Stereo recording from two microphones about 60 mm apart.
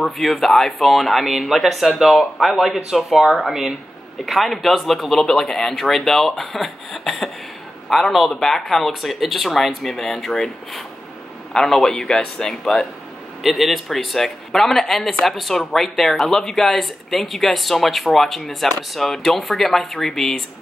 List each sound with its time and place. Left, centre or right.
0.0 s a man's voice: centre